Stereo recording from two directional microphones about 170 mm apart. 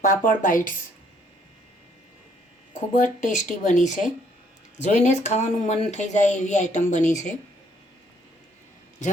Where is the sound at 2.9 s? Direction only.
50° left (ahead or behind).